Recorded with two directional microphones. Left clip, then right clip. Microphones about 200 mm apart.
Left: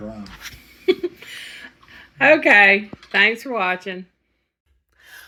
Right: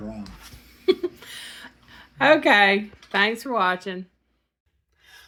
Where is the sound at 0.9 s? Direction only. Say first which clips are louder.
Left 2 dB; 5° right (ahead or behind).